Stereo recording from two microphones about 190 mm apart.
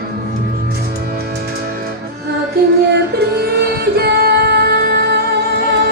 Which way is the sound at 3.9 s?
55° right (ahead or behind).